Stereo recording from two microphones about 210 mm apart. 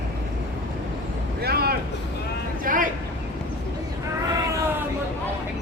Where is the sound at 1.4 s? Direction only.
45° right (ahead or behind).